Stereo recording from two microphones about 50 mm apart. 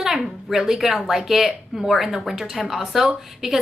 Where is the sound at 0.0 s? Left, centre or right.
Centre.